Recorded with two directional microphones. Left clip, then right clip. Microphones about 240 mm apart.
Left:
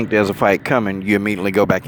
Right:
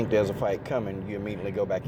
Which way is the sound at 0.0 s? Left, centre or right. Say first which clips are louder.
Left 9 dB; left.